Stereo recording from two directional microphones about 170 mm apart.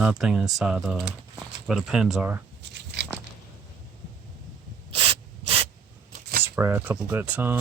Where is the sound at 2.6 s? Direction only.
90° right.